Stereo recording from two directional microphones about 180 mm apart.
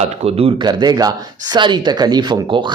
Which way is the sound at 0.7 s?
20° right (ahead or behind).